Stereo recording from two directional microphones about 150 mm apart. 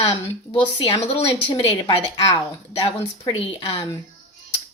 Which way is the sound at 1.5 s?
35° left (ahead or behind).